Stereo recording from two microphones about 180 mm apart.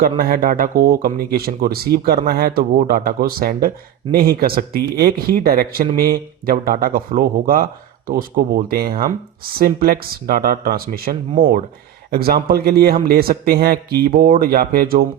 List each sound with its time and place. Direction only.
0.2 s speech: 55° right (ahead or behind)